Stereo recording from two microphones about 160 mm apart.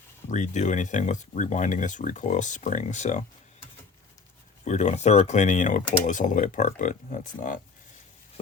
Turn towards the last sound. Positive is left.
turn(degrees=50)  # may be behind; listen again after turning